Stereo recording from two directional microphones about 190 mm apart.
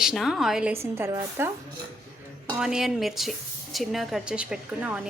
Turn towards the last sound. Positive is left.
turn(degrees=-5)  # may be behind; listen again after turning